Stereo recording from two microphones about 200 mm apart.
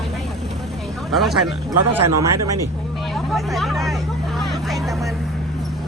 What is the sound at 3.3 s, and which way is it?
Speech, centre (ahead or behind).